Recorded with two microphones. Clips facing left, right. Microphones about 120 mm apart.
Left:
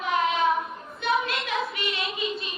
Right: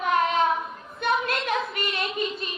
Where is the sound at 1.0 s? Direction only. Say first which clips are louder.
Right 1 dB; 45° right (ahead or behind).